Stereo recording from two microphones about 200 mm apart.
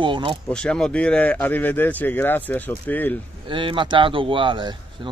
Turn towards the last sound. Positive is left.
turn(degrees=-25)  # may be behind; listen again after turning